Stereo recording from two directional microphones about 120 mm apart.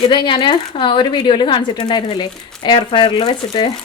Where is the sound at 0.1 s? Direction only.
40° left (ahead or behind).